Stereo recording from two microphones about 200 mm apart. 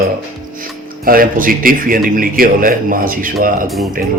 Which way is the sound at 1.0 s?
45° right (ahead or behind).